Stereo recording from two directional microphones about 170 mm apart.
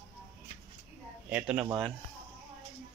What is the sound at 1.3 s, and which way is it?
Speech, 5° right (ahead or behind).